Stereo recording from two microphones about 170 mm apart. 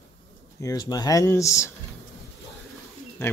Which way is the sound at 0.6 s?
20° left (ahead or behind).